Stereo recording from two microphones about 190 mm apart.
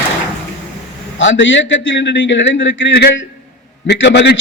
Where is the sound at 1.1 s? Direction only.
75° left (ahead or behind).